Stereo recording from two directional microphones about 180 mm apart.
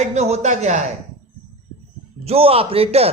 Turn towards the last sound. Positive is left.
turn(degrees=-35)  # may be behind; listen again after turning